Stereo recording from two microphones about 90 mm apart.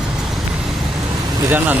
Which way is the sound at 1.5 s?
20° right (ahead or behind).